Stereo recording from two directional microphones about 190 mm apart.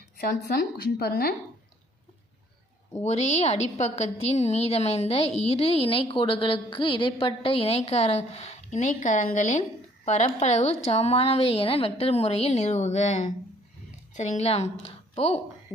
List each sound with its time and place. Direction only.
0.2 s a woman's voice: 55° left (ahead or behind)
3.0 s a woman's voice: 35° left (ahead or behind)